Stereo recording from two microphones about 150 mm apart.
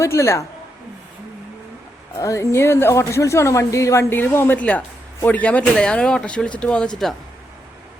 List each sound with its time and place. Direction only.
0.0 s speech: 20° left (ahead or behind)
2.1 s speech: 20° left (ahead or behind); by 7.2 s centre (ahead or behind)